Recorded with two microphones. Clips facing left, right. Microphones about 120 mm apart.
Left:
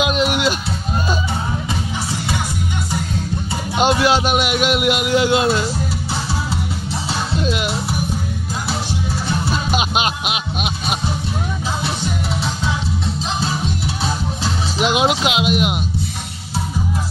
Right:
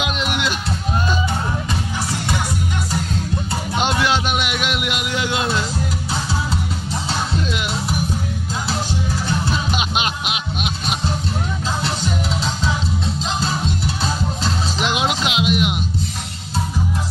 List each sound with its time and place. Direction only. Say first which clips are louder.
3.8 s music: left 5 dB; 35° left (ahead or behind)
4.4 s a man's voice: left 5 dB; 35° left (ahead or behind)
9.8 s music: left 3 dB; 10° left (ahead or behind)
15.0 s speech: left 4 dB; 10° left (ahead or behind)